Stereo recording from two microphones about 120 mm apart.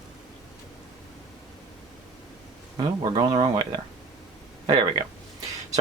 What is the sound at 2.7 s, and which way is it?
Speech, 40° right (ahead or behind).